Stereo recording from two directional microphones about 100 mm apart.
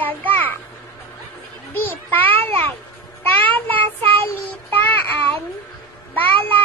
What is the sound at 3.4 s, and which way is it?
Child singing, 15° left (ahead or behind).